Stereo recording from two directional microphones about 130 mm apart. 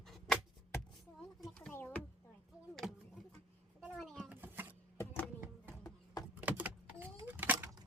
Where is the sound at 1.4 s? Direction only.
5° left (ahead or behind).